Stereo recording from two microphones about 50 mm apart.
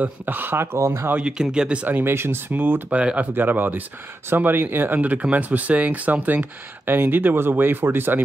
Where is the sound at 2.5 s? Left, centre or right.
Right.